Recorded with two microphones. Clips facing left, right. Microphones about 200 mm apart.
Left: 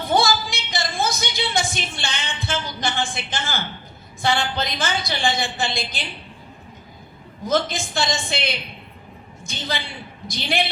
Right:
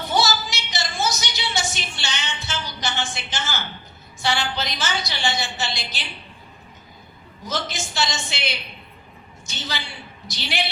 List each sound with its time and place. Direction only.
0.1 s a sound: 55° left (ahead or behind)
4.2 s a woman's voice: 55° left (ahead or behind)
7.4 s a woman's voice: 55° left (ahead or behind)